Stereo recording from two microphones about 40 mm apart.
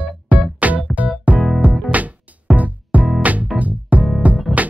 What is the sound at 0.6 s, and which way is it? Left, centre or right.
Music, right.